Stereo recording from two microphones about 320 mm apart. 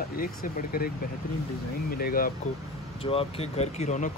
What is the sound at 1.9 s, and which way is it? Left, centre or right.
Speech, left.